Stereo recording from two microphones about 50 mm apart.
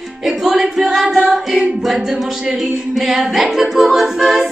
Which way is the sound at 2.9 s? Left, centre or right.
Centre.